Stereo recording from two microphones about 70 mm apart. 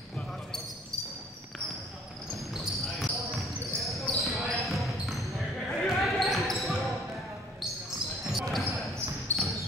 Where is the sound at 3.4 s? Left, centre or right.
Centre.